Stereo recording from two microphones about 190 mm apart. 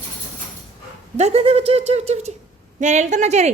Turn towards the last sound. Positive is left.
turn(degrees=-35)  # may be behind; listen again after turning